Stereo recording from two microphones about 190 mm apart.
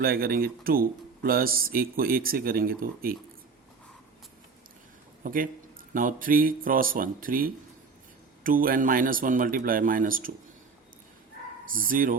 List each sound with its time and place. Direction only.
0.0 s speech: 50° right (ahead or behind)
5.2 s a man's voice: 45° right (ahead or behind)
11.6 s speech: 45° right (ahead or behind)